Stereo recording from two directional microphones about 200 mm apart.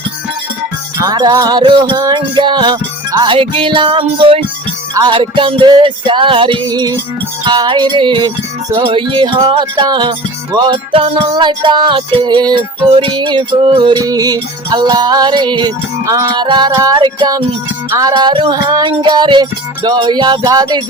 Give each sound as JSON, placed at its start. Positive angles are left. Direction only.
{"t": 0.9, "sound": "music", "side_deg": -20}